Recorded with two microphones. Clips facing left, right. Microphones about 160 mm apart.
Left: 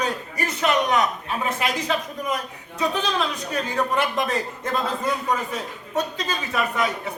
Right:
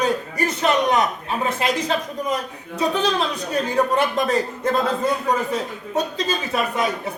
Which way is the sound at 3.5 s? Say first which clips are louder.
Right 4 dB; 35° right (ahead or behind).